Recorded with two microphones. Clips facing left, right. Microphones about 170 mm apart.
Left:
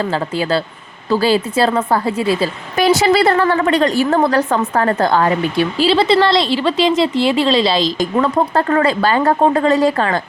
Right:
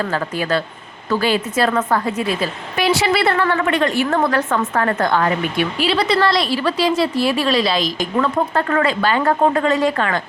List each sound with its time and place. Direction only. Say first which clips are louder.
0.0 s a woman's voice: left 3 dB; 30° left (ahead or behind)